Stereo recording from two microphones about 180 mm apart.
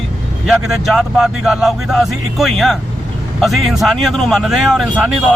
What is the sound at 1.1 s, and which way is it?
Speech, centre (ahead or behind).